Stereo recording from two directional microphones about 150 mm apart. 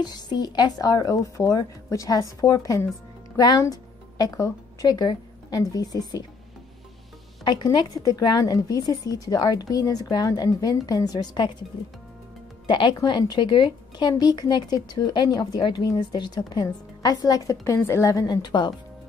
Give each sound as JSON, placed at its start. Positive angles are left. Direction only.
{"t": 0.0, "sound": "a woman's voice", "side_deg": 25}
{"t": 7.4, "sound": "a woman's voice", "side_deg": 30}
{"t": 12.6, "sound": "a woman's voice", "side_deg": 30}